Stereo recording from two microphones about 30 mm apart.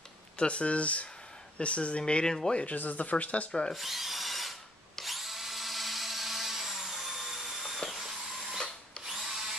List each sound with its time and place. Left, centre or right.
0.4 s speech: left
2.2 s speech: centre
2.6 s speech: left
3.7 s wood: centre
5.0 s drill: centre
7.9 s a sound: centre
9.0 s drill: centre